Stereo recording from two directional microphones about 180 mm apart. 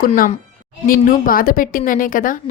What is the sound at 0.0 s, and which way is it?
A woman's voice, 45° left (ahead or behind).